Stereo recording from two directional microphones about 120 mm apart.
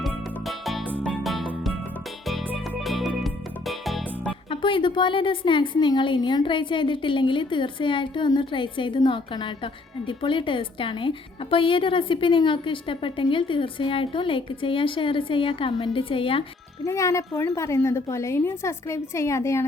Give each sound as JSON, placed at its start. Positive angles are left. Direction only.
{"t": 0.0, "sound": "music", "side_deg": 0}
{"t": 2.8, "sound": "music", "side_deg": 0}
{"t": 4.6, "sound": "a woman's voice", "side_deg": 45}
{"t": 16.8, "sound": "a woman's voice", "side_deg": 25}